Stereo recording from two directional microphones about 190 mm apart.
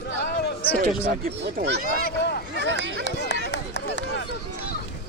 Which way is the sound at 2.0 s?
55° left (ahead or behind).